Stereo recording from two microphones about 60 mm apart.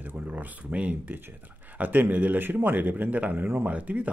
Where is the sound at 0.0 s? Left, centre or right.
Right.